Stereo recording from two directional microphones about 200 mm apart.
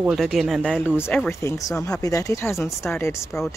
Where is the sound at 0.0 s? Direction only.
Centre (ahead or behind).